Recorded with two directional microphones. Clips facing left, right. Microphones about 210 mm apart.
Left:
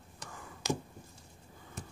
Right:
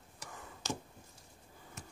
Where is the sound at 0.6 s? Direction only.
10° left (ahead or behind).